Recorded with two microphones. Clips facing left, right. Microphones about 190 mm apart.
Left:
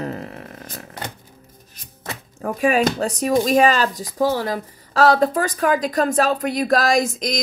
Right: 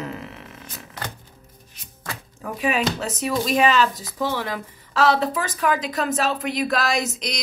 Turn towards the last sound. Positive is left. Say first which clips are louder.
# left 6 dB
turn(degrees=45)  # may be behind; listen again after turning